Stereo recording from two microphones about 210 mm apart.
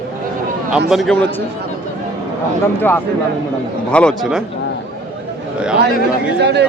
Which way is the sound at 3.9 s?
5° left (ahead or behind).